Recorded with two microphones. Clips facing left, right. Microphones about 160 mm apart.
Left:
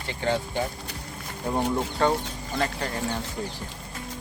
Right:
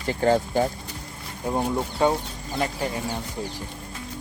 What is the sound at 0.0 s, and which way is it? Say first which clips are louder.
Speech: right 6 dB; 40° right (ahead or behind).